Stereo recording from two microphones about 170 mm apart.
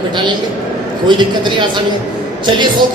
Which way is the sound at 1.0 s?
25° right (ahead or behind).